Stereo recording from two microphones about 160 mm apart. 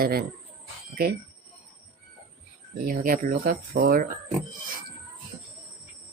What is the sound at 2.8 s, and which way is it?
Speech, 60° right (ahead or behind).